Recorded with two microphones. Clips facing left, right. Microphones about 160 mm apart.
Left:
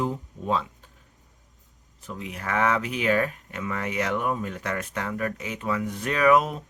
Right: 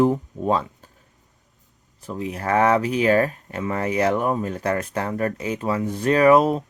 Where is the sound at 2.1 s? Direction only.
35° right (ahead or behind).